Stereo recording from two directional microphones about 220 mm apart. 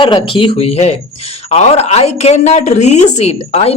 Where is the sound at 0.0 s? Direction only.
25° left (ahead or behind).